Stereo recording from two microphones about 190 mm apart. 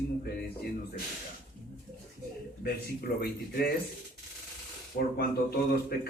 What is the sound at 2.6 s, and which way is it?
Speech, 55° left (ahead or behind).